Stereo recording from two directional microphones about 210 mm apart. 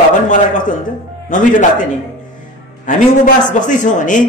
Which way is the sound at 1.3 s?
35° left (ahead or behind).